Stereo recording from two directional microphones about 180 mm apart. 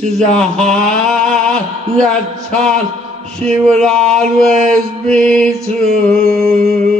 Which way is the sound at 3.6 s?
5° left (ahead or behind).